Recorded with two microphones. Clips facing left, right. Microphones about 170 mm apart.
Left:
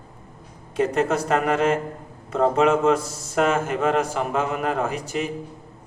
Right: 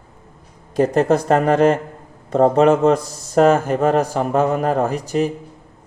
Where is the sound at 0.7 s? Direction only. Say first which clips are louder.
Right 6 dB; 35° right (ahead or behind).